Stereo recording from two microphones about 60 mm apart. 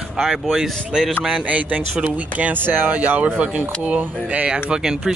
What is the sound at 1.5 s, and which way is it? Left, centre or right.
Speech, right.